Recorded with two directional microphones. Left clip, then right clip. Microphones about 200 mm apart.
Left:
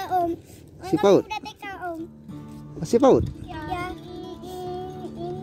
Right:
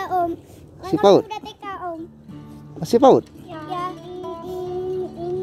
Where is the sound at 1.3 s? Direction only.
55° left (ahead or behind).